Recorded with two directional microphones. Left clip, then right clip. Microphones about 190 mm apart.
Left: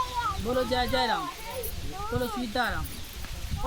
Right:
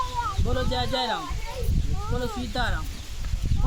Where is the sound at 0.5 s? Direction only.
20° right (ahead or behind).